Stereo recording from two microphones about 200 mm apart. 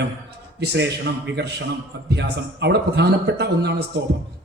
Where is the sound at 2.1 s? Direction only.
60° right (ahead or behind).